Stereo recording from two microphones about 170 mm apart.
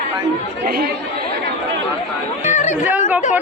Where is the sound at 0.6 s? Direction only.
65° right (ahead or behind).